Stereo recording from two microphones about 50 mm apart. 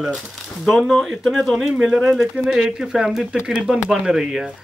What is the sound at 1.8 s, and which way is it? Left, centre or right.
Speech, centre.